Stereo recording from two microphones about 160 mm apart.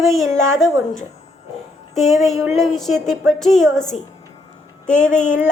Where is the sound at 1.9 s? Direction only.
Centre (ahead or behind).